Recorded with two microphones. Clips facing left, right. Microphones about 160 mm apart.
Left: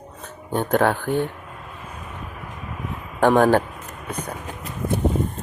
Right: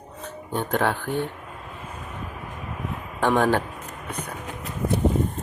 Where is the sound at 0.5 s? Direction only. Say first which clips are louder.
Left 4 dB; 45° left (ahead or behind).